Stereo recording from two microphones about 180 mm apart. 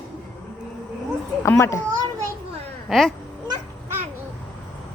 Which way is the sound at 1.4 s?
15° left (ahead or behind).